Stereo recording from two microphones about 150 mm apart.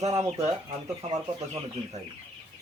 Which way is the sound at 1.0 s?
50° right (ahead or behind).